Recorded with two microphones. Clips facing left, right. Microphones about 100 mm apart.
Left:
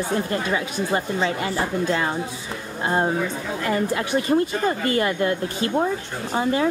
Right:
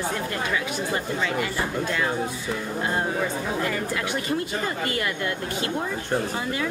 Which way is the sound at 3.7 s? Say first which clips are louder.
Left 5 dB; 30° left (ahead or behind).